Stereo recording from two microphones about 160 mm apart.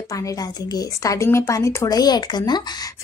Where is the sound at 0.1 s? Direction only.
20° left (ahead or behind).